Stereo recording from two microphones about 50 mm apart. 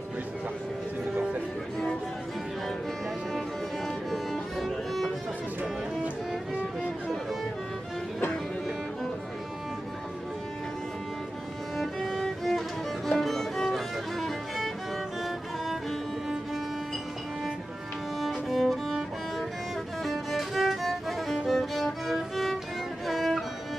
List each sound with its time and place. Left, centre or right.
3.3 s music: centre
11.7 s music: centre
18.3 s music: centre